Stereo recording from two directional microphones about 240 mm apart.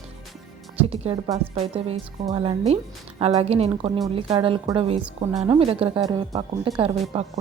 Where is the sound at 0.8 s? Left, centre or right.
Right.